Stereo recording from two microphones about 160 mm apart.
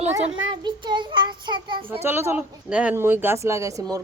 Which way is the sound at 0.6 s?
30° right (ahead or behind).